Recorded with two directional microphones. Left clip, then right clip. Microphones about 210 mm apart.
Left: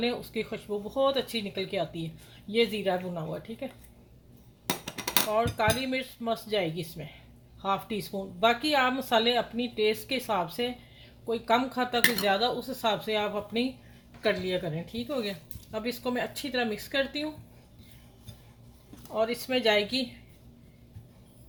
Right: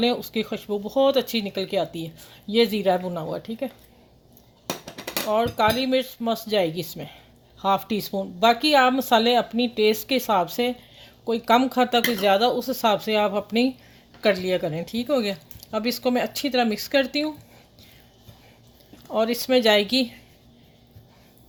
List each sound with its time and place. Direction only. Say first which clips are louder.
0.0 s speech: right 7 dB; 40° right (ahead or behind)
5.3 s speech: right 8 dB; 45° right (ahead or behind)
19.1 s speech: right 7 dB; 50° right (ahead or behind)